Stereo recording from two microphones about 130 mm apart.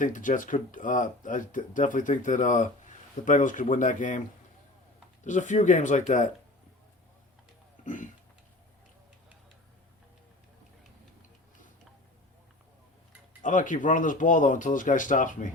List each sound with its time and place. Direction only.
0.0 s speech: 90° left
5.2 s speech: 70° left (ahead or behind)
7.9 s a sound: 85° left
13.4 s speech: 80° left